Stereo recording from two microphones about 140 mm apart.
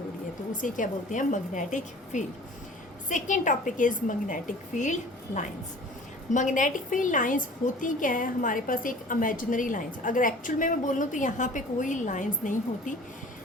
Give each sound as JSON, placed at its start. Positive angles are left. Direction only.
{"t": 0.5, "sound": "a woman's voice", "side_deg": 70}